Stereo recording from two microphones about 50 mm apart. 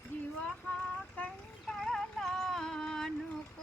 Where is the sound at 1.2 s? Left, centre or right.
Left.